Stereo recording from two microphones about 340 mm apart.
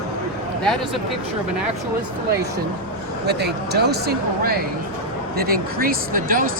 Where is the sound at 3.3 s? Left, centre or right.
Right.